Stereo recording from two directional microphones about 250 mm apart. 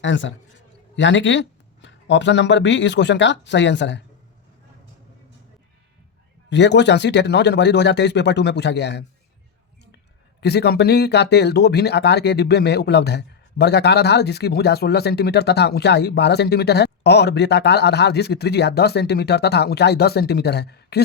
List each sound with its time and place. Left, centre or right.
0.0 s speech: left
6.5 s speech: left
10.4 s speech: left